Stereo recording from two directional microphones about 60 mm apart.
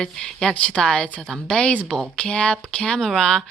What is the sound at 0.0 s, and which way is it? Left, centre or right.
Speech, centre.